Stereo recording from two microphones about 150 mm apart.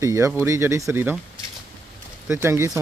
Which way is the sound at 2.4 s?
20° right (ahead or behind).